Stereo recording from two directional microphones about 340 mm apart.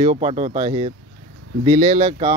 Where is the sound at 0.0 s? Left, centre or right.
Centre.